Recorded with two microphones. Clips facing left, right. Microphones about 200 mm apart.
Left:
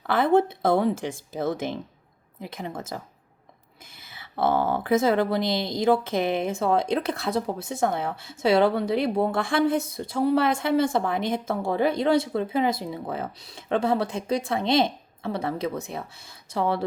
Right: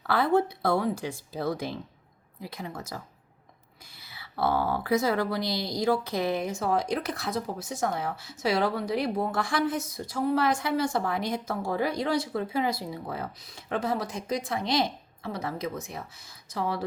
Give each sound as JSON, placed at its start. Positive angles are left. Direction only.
{"t": 0.1, "sound": "speech", "side_deg": 25}
{"t": 4.0, "sound": "speech", "side_deg": 20}